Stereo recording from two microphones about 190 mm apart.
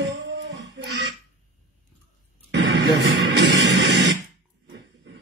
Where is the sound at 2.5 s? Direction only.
65° right (ahead or behind).